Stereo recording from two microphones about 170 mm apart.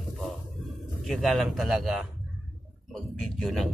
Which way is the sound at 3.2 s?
5° left (ahead or behind).